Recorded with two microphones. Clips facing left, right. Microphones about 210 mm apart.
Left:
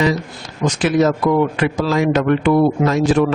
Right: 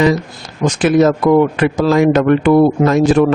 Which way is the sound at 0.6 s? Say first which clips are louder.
Right 4 dB; 50° right (ahead or behind).